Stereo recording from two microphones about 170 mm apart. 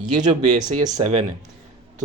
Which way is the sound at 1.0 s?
40° right (ahead or behind).